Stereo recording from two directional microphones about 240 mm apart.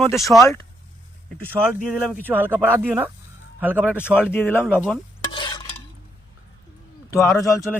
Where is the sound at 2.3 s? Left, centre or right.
Centre.